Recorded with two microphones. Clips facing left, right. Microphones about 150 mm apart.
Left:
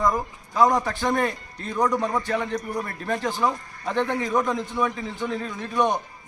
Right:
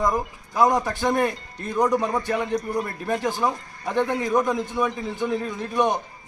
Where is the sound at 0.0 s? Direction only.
5° right (ahead or behind).